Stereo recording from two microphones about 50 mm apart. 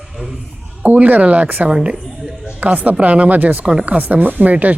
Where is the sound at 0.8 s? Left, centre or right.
Right.